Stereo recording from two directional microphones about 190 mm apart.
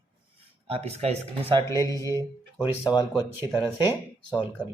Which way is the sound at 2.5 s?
25° left (ahead or behind).